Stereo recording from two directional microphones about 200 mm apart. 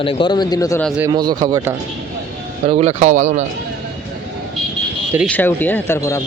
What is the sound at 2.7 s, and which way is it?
Speech, 35° right (ahead or behind).